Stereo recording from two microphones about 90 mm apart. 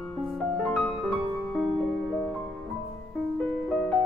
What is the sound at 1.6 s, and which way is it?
Music, 5° left (ahead or behind).